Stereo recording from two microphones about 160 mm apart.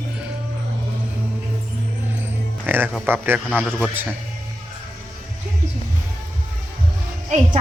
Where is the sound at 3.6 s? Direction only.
5° left (ahead or behind).